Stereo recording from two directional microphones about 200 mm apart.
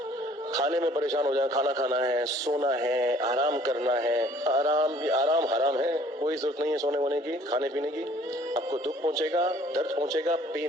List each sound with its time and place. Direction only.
0.5 s a man's voice: 15° right (ahead or behind)